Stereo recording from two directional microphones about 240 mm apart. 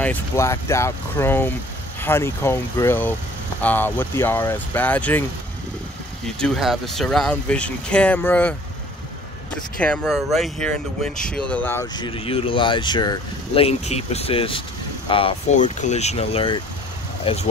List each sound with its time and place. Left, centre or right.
0.0 s speech: centre
6.4 s speech: centre
9.8 s speech: centre; by 17.5 s left